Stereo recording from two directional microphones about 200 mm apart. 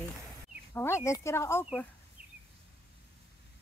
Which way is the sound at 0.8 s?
15° left (ahead or behind).